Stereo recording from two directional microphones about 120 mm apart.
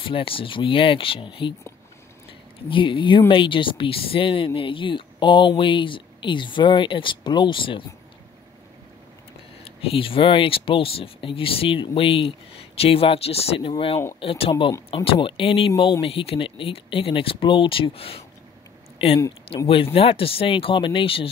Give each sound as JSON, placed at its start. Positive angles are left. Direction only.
{"t": 0.0, "sound": "speech", "side_deg": 50}
{"t": 2.7, "sound": "speech", "side_deg": 45}
{"t": 9.7, "sound": "speech", "side_deg": 50}
{"t": 14.5, "sound": "speech", "side_deg": 35}
{"t": 15.0, "sound": "speech", "side_deg": 45}
{"t": 19.7, "sound": "speech", "side_deg": 50}